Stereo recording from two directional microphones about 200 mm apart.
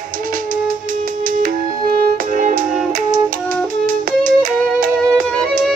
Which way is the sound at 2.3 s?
40° right (ahead or behind).